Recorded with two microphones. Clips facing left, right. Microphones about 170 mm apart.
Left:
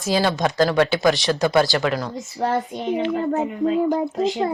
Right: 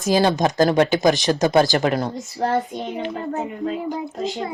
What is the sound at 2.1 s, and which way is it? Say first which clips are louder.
Speech: right 1 dB; centre (ahead or behind).